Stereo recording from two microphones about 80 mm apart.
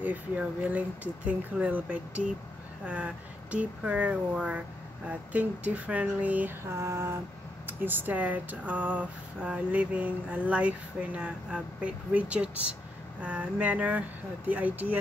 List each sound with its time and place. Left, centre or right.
0.0 s speech: centre
3.5 s speech: centre
6.7 s a sound: right
7.6 s speech: right